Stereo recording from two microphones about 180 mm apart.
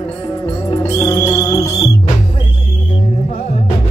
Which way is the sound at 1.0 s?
15° left (ahead or behind).